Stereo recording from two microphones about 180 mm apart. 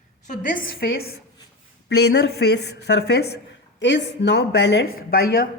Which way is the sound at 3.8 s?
75° left (ahead or behind).